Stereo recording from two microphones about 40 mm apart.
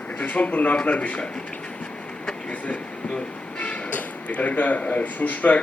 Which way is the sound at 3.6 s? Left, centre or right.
Left.